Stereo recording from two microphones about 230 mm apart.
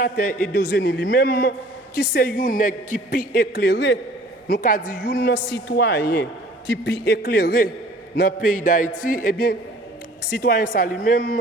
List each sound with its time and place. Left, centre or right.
0.0 s a woman's voice: left